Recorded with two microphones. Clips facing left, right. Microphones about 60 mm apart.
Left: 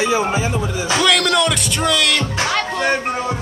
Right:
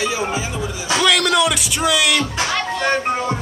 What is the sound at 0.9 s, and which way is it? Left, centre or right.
Speech, centre.